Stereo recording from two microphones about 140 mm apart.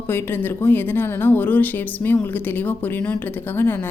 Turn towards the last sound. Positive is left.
turn(degrees=15)  # may be behind; listen again after turning